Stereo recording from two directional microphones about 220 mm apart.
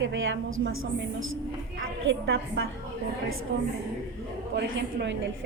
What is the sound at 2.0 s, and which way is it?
A woman's voice, 60° right (ahead or behind).